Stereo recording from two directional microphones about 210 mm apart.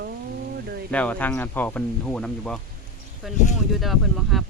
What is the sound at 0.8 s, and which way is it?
Speech, 5° left (ahead or behind).